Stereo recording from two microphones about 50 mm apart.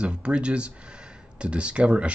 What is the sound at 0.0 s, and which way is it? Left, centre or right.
Speech, right.